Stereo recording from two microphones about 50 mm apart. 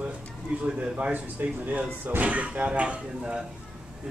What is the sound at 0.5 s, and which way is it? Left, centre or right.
Speech, right.